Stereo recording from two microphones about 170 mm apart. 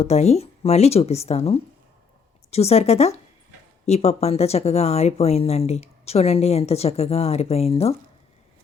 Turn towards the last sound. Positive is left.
turn(degrees=35)  # may be behind; listen again after turning